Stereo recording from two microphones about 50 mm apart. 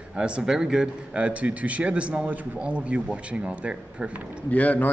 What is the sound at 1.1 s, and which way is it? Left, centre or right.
A man's voice, right.